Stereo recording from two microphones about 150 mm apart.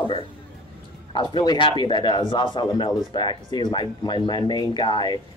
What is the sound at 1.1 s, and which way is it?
Speech, 30° left (ahead or behind).